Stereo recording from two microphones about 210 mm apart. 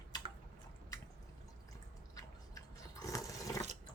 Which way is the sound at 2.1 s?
15° left (ahead or behind).